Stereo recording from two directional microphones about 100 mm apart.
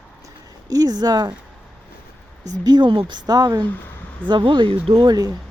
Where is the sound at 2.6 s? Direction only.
50° right (ahead or behind).